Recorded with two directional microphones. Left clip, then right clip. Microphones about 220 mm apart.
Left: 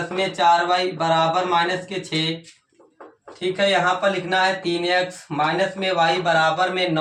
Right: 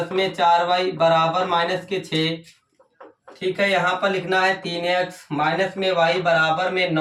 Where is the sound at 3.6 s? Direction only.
15° right (ahead or behind).